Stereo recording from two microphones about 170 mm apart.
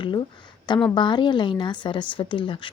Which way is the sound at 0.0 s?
30° left (ahead or behind).